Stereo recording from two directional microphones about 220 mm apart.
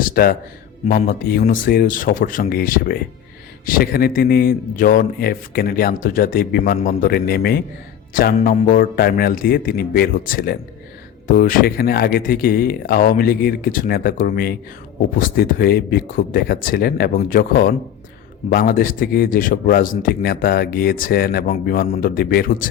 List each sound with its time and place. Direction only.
0.0 s a man's voice: 40° left (ahead or behind)